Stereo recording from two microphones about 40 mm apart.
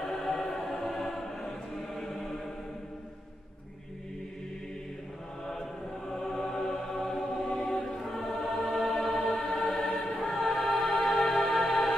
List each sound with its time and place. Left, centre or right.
0.0 s choir: centre
2.0 s chant: centre
5.5 s chant: centre
7.6 s choir: centre
8.0 s choir: centre
10.1 s choir: centre
11.0 s music: centre